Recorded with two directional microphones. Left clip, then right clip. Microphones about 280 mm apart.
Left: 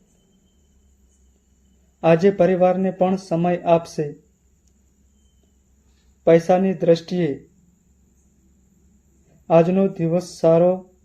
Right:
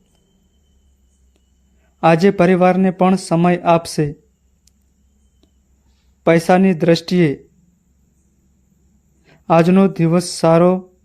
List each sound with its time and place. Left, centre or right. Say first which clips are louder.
2.0 s speech: right 3 dB; right
6.2 s speech: right 2 dB; right
9.5 s speech: right 3 dB; right